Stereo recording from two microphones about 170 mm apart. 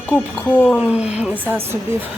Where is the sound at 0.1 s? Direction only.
10° left (ahead or behind).